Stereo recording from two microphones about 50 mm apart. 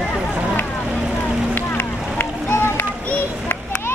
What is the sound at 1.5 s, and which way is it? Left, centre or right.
Run, left.